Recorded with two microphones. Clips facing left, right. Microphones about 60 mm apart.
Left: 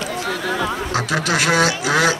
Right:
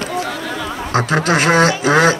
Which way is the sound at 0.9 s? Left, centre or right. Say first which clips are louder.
Right 9 dB; right.